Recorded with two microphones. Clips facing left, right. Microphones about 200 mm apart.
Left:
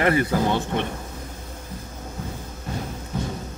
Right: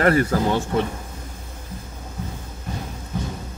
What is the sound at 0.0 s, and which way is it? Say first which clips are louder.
Speech: right 3 dB; 15° left (ahead or behind).